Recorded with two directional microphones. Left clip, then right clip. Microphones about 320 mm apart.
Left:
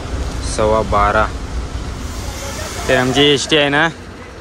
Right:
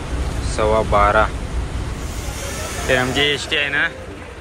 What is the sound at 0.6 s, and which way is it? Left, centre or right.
Speech, centre.